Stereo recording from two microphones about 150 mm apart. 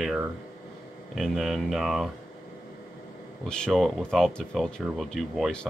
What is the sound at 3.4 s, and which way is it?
Speech, 5° left (ahead or behind).